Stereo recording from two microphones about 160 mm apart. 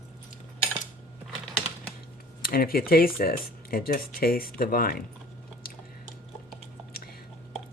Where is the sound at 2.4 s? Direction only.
65° left (ahead or behind).